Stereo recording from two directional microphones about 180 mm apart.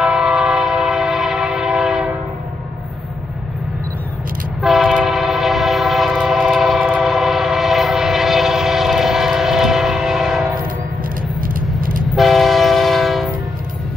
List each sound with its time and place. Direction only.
0.0 s train: 5° right (ahead or behind)
4.6 s train: centre (ahead or behind)
11.4 s vehicle: 50° right (ahead or behind)
12.2 s train: centre (ahead or behind)